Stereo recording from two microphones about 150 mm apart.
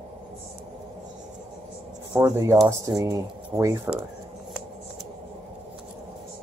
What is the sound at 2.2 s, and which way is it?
Speech, 20° right (ahead or behind).